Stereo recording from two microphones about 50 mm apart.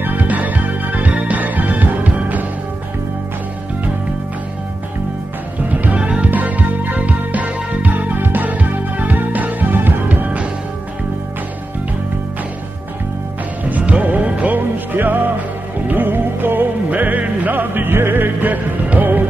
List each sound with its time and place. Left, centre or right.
0.0 s music: right
5.9 s music: right
13.7 s music: right